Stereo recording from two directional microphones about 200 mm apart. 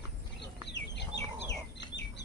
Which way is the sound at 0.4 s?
60° left (ahead or behind).